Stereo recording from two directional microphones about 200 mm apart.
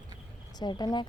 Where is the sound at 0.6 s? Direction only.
20° left (ahead or behind).